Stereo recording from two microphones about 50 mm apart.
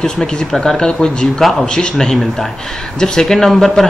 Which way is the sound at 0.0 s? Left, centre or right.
Centre.